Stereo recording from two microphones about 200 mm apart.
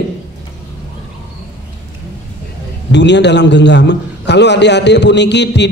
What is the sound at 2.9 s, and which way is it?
A man's voice, 60° left (ahead or behind).